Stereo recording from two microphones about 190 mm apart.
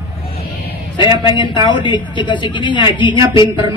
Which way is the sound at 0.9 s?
25° left (ahead or behind).